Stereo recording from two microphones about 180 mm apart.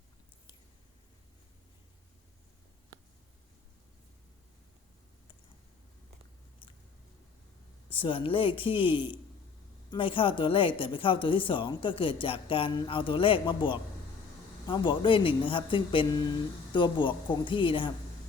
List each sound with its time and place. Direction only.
7.9 s a woman's voice: 30° left (ahead or behind)